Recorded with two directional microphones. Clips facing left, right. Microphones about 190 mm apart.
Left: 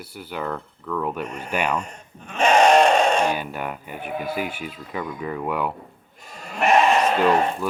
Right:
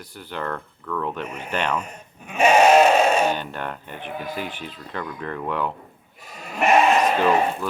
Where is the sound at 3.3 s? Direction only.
10° left (ahead or behind).